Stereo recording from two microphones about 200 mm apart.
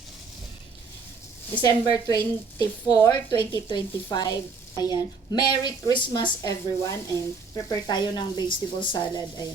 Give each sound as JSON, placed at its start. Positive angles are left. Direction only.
{"t": 1.6, "sound": "a woman's voice", "side_deg": 20}